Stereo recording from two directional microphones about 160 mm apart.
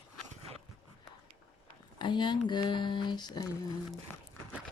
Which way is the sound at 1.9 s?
30° left (ahead or behind).